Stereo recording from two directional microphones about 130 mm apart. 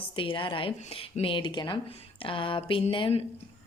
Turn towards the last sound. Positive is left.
turn(degrees=40)  # may be behind; listen again after turning